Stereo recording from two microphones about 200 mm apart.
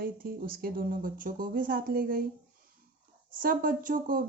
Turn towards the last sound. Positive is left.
turn(degrees=-45)  # may be behind; listen again after turning